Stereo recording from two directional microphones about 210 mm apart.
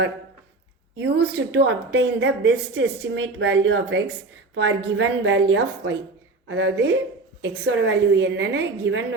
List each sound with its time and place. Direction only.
0.9 s a woman's voice: 55° right (ahead or behind)